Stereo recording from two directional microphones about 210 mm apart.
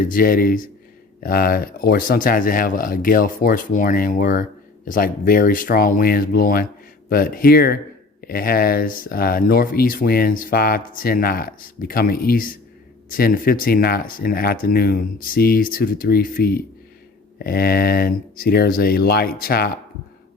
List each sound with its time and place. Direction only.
0.0 s speech: 40° left (ahead or behind)